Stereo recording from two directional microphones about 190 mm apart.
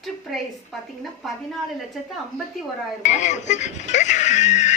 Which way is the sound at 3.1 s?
40° left (ahead or behind).